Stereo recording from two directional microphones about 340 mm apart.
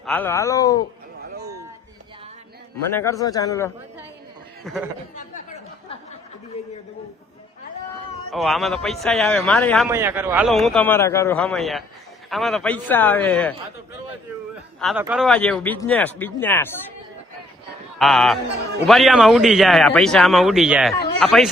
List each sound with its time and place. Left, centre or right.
0.0 s speech: centre
1.2 s a sound: right
2.9 s a man's voice: centre
8.3 s a man's voice: centre
14.5 s a man's voice: centre
18.0 s a man's voice: centre